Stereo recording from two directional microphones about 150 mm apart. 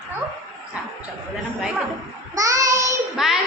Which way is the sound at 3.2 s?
5° right (ahead or behind).